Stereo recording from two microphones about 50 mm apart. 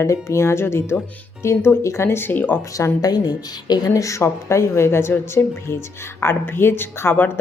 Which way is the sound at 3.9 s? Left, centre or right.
Left.